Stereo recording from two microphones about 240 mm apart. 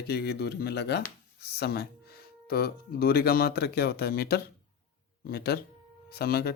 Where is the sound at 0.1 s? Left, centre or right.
Left.